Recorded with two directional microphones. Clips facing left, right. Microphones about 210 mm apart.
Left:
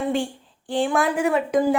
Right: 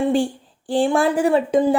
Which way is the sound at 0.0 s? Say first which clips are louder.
Right 5 dB; 35° right (ahead or behind).